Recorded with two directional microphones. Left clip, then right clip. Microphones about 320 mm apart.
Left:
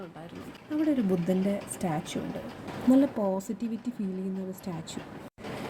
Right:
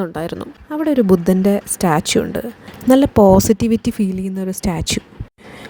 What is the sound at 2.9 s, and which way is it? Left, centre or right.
Speech, right.